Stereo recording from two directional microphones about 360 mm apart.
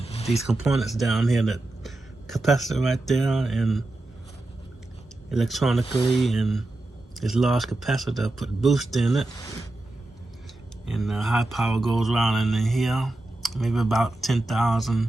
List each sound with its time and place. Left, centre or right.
0.0 s a sound: centre
0.4 s speech: centre
5.3 s speech: centre
10.8 s speech: centre